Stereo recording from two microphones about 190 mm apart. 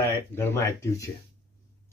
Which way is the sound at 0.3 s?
10° left (ahead or behind).